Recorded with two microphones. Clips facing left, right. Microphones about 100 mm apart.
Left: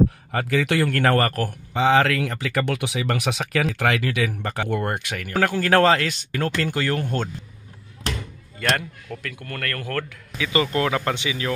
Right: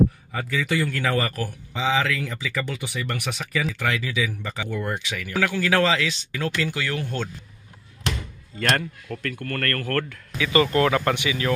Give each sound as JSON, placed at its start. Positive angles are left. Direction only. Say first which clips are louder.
{"t": 0.3, "sound": "a man's voice", "louder": "left 4 dB", "side_deg": 70}
{"t": 8.7, "sound": "speech", "louder": "right 1 dB", "side_deg": 10}
{"t": 10.3, "sound": "speech", "louder": "right 2 dB", "side_deg": 25}